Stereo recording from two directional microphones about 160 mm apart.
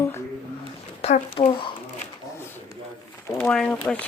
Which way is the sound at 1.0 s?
40° left (ahead or behind).